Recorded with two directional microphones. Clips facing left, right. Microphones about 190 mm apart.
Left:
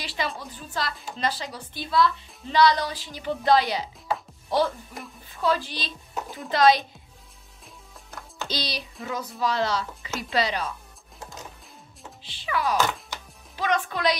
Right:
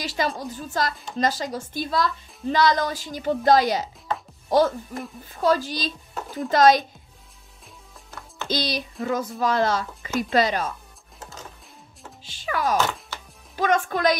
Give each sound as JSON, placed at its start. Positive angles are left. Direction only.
{"t": 0.0, "sound": "speech", "side_deg": -45}
{"t": 8.5, "sound": "speech", "side_deg": -50}
{"t": 12.2, "sound": "speech", "side_deg": -45}